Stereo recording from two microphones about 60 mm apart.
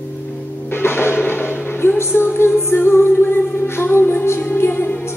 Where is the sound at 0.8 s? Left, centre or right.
Left.